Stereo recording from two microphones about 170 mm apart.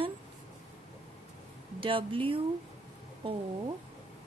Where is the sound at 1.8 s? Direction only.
30° right (ahead or behind).